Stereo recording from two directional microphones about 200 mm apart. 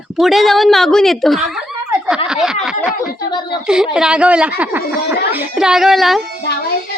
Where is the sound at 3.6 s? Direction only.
5° right (ahead or behind).